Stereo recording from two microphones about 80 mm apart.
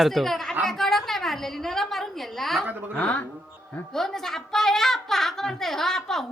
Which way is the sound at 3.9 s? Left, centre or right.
Centre.